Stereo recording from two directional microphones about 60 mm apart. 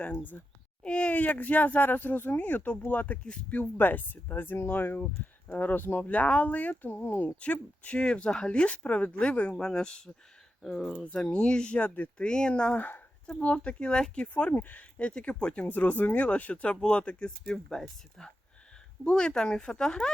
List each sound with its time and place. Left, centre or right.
0.2 s speech: left
7.3 s speech: left
12.2 s speech: centre
12.7 s speech: left
14.5 s speech: left; by 20.1 s centre